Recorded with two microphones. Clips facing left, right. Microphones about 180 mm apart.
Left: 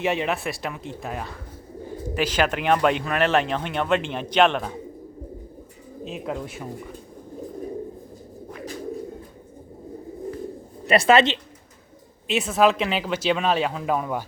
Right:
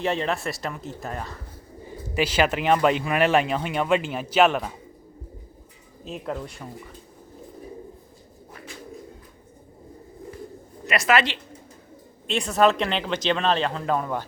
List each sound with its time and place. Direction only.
0.0 s speech: 5° left (ahead or behind)
6.1 s speech: centre (ahead or behind)
10.8 s speech: 30° left (ahead or behind)
12.3 s speech: 5° left (ahead or behind)